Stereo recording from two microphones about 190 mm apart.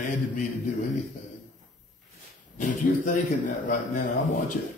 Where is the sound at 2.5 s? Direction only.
40° left (ahead or behind).